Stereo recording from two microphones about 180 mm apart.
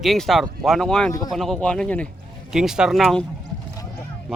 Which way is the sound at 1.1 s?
20° left (ahead or behind).